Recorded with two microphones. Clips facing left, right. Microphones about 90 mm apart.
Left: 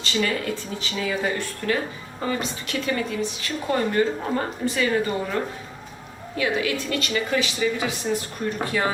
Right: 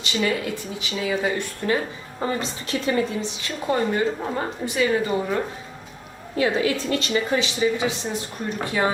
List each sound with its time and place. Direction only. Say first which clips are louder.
0.0 s speech: right 1 dB; 15° right (ahead or behind)
2.2 s a woman's voice: right 1 dB; 30° right (ahead or behind)
6.3 s a woman's voice: right 3 dB; 30° right (ahead or behind)